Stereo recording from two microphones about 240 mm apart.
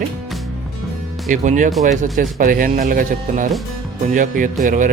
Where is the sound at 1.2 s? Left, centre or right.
Right.